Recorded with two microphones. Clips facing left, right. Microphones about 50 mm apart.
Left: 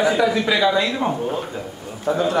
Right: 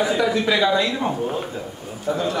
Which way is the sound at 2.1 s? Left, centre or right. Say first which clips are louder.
Left 4 dB; left.